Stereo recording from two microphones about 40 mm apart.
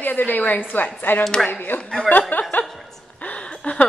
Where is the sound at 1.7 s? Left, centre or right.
Left.